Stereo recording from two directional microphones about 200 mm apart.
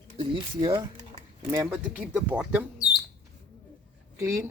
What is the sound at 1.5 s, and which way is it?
Speech, 10° right (ahead or behind).